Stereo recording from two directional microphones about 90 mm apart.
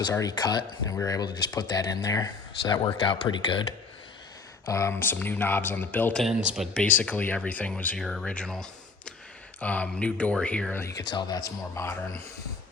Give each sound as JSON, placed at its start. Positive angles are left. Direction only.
{"t": 0.1, "sound": "speech", "side_deg": 40}
{"t": 2.6, "sound": "speech", "side_deg": 55}
{"t": 4.6, "sound": "speech", "side_deg": 35}
{"t": 6.2, "sound": "speech", "side_deg": -5}
{"t": 6.8, "sound": "speech", "side_deg": 15}
{"t": 7.9, "sound": "speech", "side_deg": 5}
{"t": 10.8, "sound": "a man's voice", "side_deg": 35}
{"t": 11.1, "sound": "speech", "side_deg": 55}
{"t": 11.3, "sound": "a man's voice", "side_deg": 35}